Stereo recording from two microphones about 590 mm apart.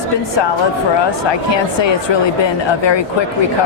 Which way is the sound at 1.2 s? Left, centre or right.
Left.